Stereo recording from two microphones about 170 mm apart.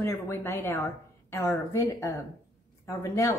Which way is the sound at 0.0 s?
15° left (ahead or behind).